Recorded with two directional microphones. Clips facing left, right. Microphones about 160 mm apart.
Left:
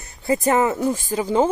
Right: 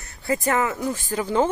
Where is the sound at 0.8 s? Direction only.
15° left (ahead or behind).